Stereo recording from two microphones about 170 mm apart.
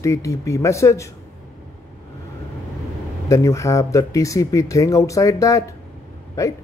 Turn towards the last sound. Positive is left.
turn(degrees=20)  # may be behind; listen again after turning